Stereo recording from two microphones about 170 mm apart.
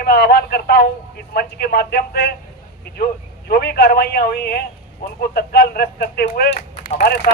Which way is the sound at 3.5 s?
65° left (ahead or behind).